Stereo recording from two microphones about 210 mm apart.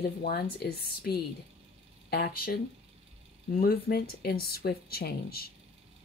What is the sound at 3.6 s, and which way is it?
Speech, 45° left (ahead or behind).